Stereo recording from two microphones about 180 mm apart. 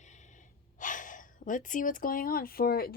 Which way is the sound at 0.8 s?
45° left (ahead or behind).